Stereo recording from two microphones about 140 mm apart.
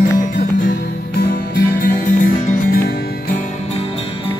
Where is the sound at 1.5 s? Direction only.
90° left.